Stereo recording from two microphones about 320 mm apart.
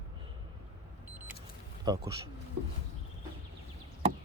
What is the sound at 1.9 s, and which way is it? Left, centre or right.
Speech, centre.